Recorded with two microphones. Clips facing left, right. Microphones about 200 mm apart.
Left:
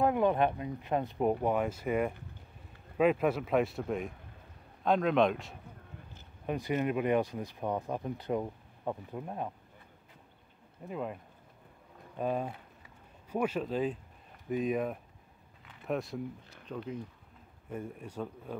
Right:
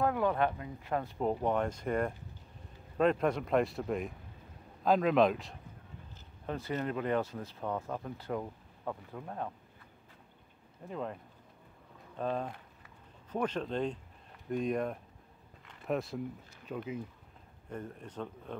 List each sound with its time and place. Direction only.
0.0 s speech: 20° left (ahead or behind)
1.3 s speech: 5° left (ahead or behind)
6.4 s speech: 15° left (ahead or behind)
10.9 s speech: 10° left (ahead or behind)
12.2 s speech: 10° left (ahead or behind)
15.6 s a sound: 5° left (ahead or behind)
16.6 s speech: 5° right (ahead or behind)
17.6 s speech: 10° left (ahead or behind)